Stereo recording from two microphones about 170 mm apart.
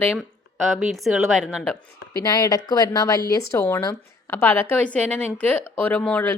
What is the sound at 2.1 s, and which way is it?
A woman's voice, 20° left (ahead or behind).